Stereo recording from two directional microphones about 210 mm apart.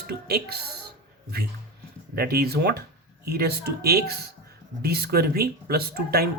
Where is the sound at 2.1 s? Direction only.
45° right (ahead or behind).